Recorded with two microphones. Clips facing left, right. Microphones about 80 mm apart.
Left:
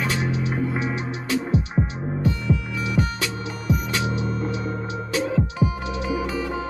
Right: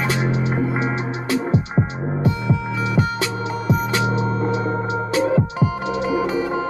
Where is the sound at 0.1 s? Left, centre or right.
Right.